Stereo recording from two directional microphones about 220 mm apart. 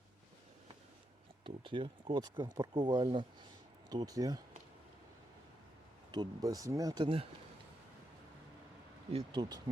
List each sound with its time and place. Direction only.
1.5 s speech: 25° right (ahead or behind)
6.1 s speech: 15° right (ahead or behind)
9.1 s speech: 20° right (ahead or behind)